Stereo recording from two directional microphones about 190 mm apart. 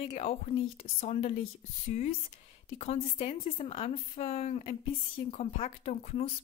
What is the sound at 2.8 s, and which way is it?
A woman's voice, 35° left (ahead or behind).